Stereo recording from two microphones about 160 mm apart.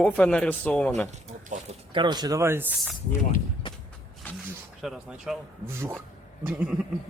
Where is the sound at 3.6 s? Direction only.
30° left (ahead or behind).